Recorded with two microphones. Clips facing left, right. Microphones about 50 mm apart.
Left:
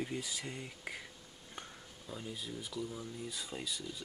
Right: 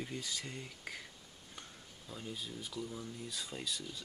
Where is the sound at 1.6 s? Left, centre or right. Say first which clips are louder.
Left 4 dB; left.